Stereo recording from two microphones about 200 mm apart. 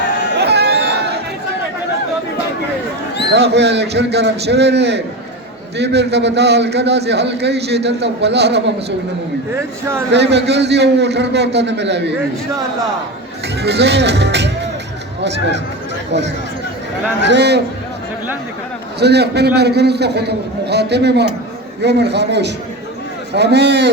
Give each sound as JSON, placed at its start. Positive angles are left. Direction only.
{"t": 0.3, "sound": "chatter", "side_deg": -55}
{"t": 3.3, "sound": "a man's voice", "side_deg": -60}
{"t": 10.1, "sound": "a man's voice", "side_deg": -60}
{"t": 13.6, "sound": "a man's voice", "side_deg": -55}
{"t": 17.2, "sound": "a man's voice", "side_deg": -60}
{"t": 18.9, "sound": "a man's voice", "side_deg": -55}